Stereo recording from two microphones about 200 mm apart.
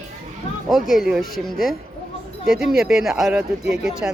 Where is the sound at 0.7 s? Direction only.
Centre (ahead or behind).